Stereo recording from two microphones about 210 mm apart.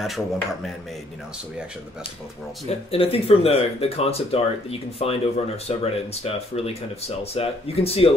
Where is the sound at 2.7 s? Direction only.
30° left (ahead or behind).